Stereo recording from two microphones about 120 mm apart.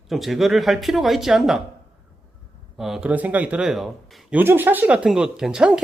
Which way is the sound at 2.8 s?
5° right (ahead or behind).